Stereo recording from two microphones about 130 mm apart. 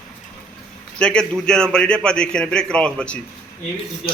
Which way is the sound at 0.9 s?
5° left (ahead or behind).